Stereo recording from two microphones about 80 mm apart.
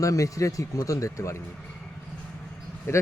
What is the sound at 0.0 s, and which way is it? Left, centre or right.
Speech, left.